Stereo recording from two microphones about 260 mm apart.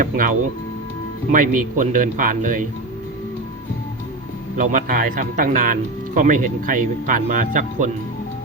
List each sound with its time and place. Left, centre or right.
0.0 s speech: right
4.5 s speech: right